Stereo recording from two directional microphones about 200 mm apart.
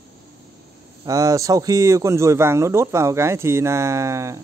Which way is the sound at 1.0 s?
15° right (ahead or behind).